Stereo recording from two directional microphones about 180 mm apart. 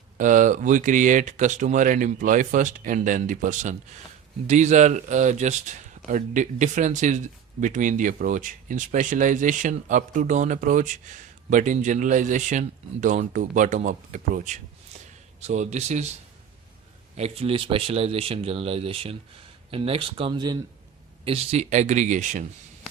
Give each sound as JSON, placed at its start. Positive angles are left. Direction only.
{"t": 0.2, "sound": "speech", "side_deg": -45}
{"t": 17.2, "sound": "speech", "side_deg": -35}